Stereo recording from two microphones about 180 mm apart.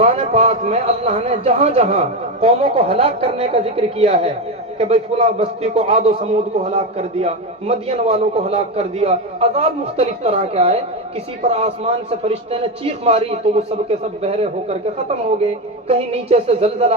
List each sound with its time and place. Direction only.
0.0 s a man's voice: 35° right (ahead or behind)